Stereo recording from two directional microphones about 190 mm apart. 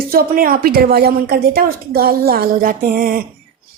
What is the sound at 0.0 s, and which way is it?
A woman's voice, 50° right (ahead or behind).